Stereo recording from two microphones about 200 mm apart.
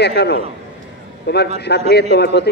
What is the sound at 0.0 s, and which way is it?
A man's voice, 55° left (ahead or behind).